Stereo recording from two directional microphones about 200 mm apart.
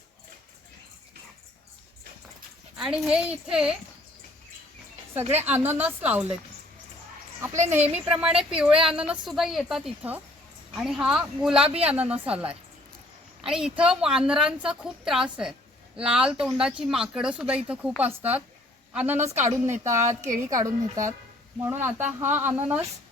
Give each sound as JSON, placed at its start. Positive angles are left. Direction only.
{"t": 2.7, "sound": "a woman's voice", "side_deg": -5}
{"t": 5.5, "sound": "speech", "side_deg": -10}
{"t": 7.4, "sound": "a woman's voice", "side_deg": -15}
{"t": 20.0, "sound": "a woman's voice", "side_deg": -40}
{"t": 20.5, "sound": "speech", "side_deg": -15}